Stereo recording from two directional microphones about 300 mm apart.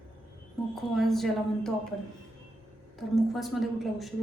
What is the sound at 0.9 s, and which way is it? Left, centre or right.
Speech, centre.